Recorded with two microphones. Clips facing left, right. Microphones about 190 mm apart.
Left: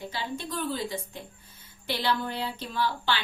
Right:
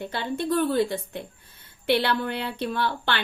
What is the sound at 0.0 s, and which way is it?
Speech, 60° right (ahead or behind).